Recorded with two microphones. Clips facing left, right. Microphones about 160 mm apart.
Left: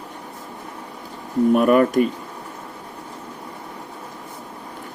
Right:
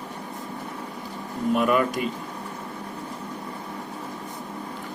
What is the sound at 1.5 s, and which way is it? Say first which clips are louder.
Speech: left 6 dB; 45° left (ahead or behind).